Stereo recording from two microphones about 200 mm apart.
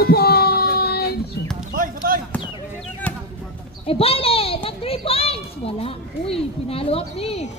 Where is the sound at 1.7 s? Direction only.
45° right (ahead or behind).